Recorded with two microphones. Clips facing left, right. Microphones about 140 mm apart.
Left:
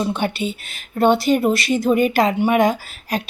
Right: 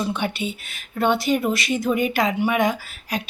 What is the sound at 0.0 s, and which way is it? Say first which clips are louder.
Speech: left 3 dB; 30° left (ahead or behind).